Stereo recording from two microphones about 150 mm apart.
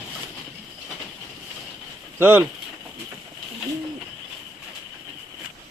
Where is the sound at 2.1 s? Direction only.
15° right (ahead or behind).